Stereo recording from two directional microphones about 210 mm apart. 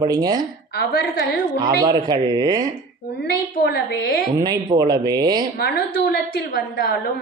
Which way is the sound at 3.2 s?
50° left (ahead or behind).